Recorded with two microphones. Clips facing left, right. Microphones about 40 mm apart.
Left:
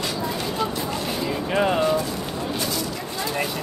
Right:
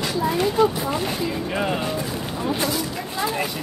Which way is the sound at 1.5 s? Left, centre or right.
Centre.